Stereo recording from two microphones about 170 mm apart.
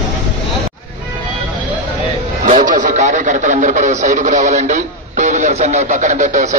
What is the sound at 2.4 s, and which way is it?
A man's voice, 50° right (ahead or behind).